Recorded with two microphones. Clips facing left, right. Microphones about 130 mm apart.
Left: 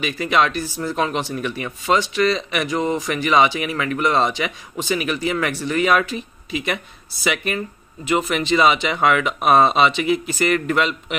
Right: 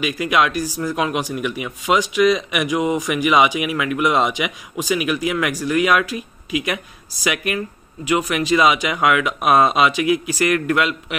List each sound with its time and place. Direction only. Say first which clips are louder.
0.0 s a man's voice: right 1 dB; 5° right (ahead or behind)